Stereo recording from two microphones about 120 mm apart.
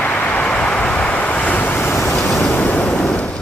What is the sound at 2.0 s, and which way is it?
Vehicle, centre (ahead or behind).